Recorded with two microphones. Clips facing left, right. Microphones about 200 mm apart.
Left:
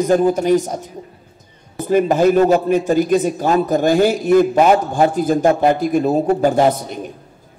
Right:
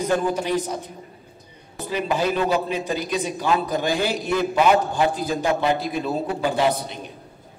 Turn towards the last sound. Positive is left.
turn(degrees=45)  # may be behind; listen again after turning